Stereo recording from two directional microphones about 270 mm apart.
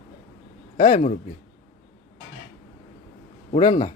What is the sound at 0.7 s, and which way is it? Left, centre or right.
Speech, left.